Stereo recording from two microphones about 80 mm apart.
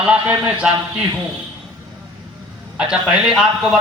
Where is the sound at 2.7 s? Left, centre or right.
Centre.